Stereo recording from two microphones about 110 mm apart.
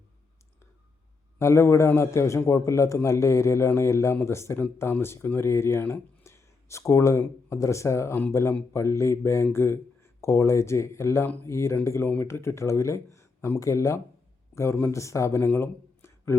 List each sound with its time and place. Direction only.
1.4 s a man's voice: 25° left (ahead or behind)